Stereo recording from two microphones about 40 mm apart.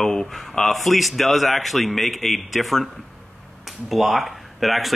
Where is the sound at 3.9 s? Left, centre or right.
Centre.